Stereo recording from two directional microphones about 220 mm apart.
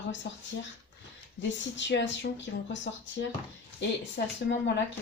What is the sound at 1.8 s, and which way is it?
Speech, 55° left (ahead or behind).